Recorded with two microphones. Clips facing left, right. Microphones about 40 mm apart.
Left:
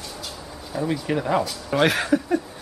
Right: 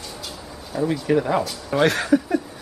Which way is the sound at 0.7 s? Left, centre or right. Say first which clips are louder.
Right 4 dB; centre.